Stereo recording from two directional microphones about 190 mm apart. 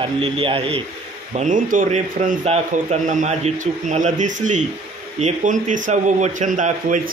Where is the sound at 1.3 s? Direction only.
40° right (ahead or behind).